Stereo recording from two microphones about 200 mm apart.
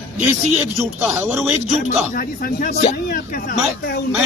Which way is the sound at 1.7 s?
40° left (ahead or behind).